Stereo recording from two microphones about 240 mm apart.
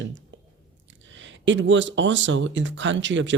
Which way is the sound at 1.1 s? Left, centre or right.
Right.